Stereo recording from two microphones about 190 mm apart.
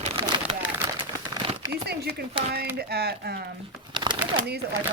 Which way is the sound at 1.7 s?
55° right (ahead or behind).